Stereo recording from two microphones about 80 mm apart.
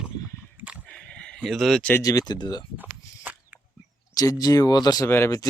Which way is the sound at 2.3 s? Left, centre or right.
Left.